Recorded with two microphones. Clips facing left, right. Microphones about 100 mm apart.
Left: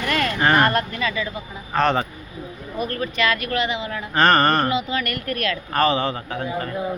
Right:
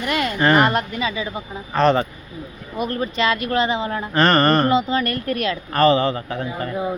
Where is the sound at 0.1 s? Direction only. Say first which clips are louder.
Right 2 dB; 15° right (ahead or behind).